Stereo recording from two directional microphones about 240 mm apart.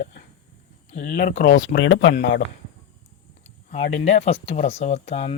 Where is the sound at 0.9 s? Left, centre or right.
Left.